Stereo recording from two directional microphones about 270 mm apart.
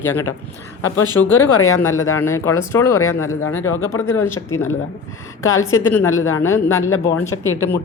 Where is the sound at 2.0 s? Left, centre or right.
Centre.